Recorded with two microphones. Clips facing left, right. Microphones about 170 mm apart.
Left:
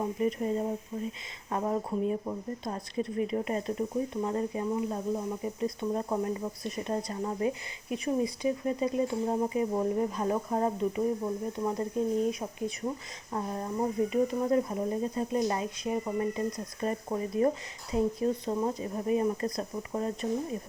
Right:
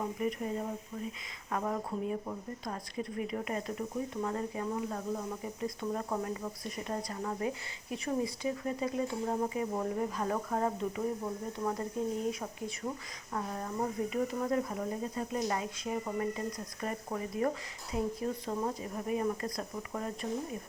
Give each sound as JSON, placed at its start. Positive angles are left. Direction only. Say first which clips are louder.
{"t": 0.0, "sound": "speech", "louder": "left 4 dB", "side_deg": 25}
{"t": 1.5, "sound": "speech", "louder": "left 4 dB", "side_deg": 25}